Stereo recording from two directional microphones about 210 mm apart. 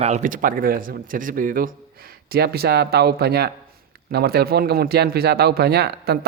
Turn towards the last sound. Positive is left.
turn(degrees=-50)  # may be behind; listen again after turning